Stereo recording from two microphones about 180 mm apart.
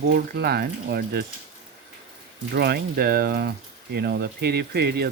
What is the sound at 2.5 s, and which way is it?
Speech, 60° right (ahead or behind).